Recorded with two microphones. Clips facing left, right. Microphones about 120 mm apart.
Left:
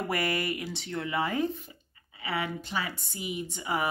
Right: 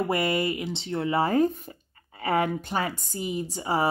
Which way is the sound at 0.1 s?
25° right (ahead or behind).